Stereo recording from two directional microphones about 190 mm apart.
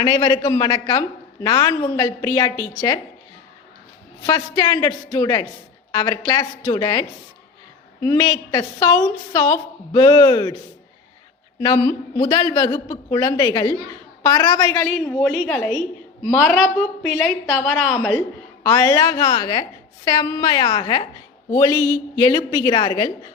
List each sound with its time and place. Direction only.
0.0 s a woman's voice: 20° left (ahead or behind)
4.3 s a woman's voice: 25° left (ahead or behind)
8.0 s a woman's voice: 15° left (ahead or behind)
11.6 s a woman's voice: 20° left (ahead or behind)
14.8 s a woman's voice: 5° left (ahead or behind)
18.6 s a woman's voice: 15° left (ahead or behind)